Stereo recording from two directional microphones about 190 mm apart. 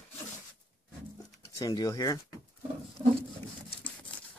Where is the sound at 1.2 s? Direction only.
20° left (ahead or behind).